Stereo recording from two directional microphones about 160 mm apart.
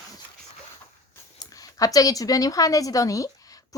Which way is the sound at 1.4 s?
20° left (ahead or behind).